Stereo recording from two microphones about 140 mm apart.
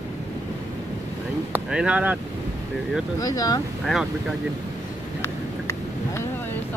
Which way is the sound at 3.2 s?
25° left (ahead or behind).